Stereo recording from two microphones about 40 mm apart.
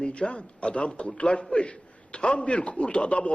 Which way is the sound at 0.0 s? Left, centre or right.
Left.